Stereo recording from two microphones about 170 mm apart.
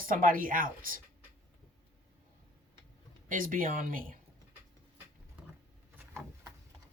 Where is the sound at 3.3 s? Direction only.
55° right (ahead or behind).